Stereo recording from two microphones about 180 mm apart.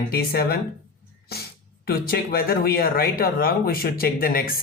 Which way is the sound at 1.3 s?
60° left (ahead or behind).